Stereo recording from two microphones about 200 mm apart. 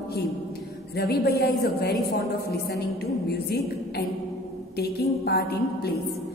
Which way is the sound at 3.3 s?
55° left (ahead or behind).